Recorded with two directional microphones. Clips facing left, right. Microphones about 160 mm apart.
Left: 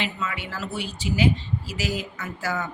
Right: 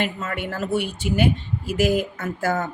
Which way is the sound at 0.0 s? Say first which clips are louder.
Right 4 dB; 50° right (ahead or behind).